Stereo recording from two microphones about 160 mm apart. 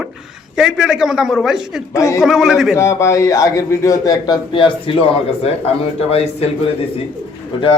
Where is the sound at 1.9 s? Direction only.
20° left (ahead or behind).